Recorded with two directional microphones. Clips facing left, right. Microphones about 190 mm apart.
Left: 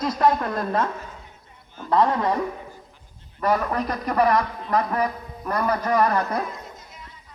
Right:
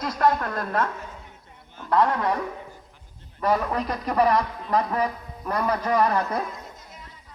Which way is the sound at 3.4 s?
Centre (ahead or behind).